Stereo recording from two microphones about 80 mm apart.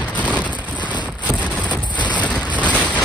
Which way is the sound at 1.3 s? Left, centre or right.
Centre.